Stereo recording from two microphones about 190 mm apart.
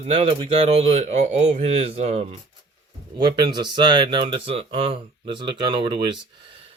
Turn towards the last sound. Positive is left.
turn(degrees=-30)  # may be behind; listen again after turning